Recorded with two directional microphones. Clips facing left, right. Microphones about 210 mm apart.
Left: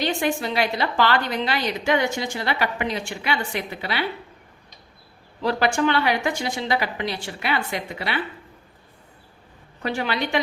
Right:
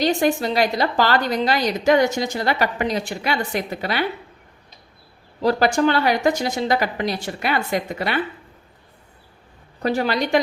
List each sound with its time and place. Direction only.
0.0 s a woman's voice: 40° right (ahead or behind)
5.4 s a woman's voice: 40° right (ahead or behind)
9.8 s a woman's voice: 40° right (ahead or behind)